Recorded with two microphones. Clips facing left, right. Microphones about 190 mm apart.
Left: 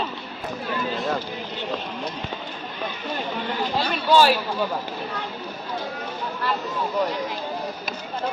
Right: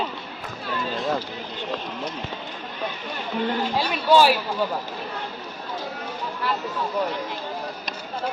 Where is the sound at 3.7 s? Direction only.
10° right (ahead or behind).